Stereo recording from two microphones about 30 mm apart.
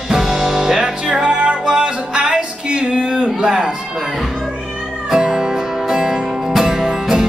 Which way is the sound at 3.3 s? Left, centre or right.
Right.